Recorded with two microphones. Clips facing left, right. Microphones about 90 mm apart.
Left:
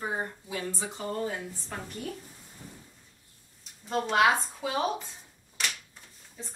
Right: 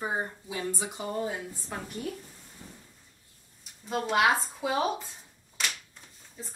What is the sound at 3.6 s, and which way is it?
Speech, centre (ahead or behind).